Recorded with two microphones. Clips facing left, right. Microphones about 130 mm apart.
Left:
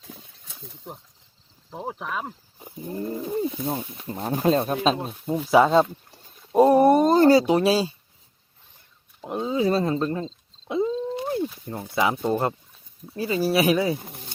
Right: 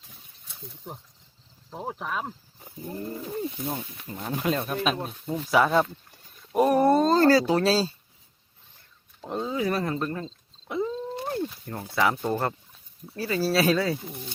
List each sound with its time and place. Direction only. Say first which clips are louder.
0.1 s a sound: left 9 dB; 90° left
1.7 s speech: left 1 dB; centre (ahead or behind)
2.6 s speech: left 4 dB; 20° left (ahead or behind)
6.1 s a sound: left 5 dB; 25° left (ahead or behind)
9.2 s speech: left 4 dB; 15° left (ahead or behind)
14.0 s speech: right 3 dB; 50° left (ahead or behind)